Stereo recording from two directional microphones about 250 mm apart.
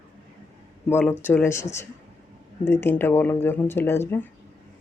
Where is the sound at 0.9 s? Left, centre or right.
Centre.